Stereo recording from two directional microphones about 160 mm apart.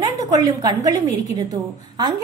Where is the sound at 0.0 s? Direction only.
25° right (ahead or behind).